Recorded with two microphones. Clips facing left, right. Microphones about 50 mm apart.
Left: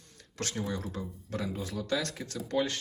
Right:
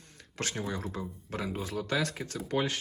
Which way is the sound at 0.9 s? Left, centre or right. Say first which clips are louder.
Even; right.